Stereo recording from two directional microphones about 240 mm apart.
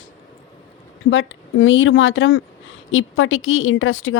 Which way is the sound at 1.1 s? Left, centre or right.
Left.